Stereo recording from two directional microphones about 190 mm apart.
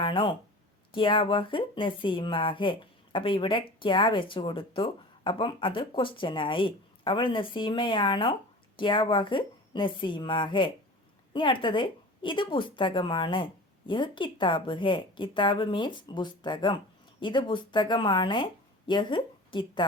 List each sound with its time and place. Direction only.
0.0 s speech: 25° left (ahead or behind)